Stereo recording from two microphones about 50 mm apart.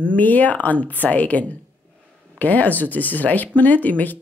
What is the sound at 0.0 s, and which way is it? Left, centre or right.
A woman's voice, left.